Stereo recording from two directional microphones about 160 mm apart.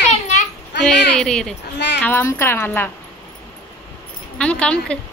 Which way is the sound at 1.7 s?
90° left.